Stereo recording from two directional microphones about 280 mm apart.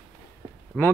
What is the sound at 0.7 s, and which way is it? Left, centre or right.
Speech, centre.